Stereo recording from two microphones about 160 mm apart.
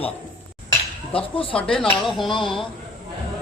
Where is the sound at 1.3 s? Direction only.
35° left (ahead or behind).